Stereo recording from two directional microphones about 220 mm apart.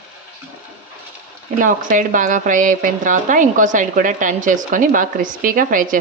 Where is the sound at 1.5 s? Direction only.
35° right (ahead or behind).